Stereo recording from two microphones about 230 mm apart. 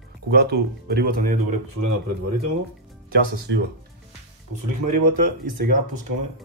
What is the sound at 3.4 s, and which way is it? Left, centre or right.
Speech, right.